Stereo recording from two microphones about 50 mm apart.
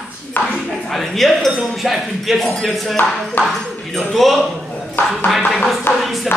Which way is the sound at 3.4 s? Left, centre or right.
Left.